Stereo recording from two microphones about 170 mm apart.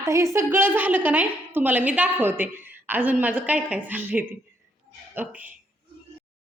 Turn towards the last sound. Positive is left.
turn(degrees=-10)  # may be behind; listen again after turning